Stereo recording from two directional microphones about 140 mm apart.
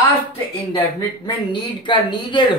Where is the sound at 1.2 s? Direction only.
35° left (ahead or behind).